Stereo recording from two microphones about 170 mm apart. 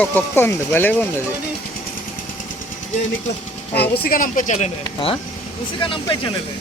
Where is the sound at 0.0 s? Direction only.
10° left (ahead or behind).